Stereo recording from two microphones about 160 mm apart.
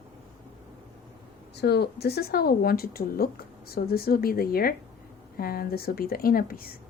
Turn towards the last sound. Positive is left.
turn(degrees=65)  # may be behind; listen again after turning